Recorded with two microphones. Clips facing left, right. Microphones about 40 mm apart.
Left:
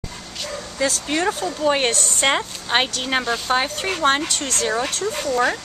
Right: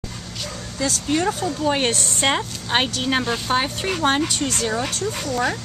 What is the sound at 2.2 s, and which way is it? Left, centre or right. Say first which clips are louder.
Speech: left 1 dB; centre.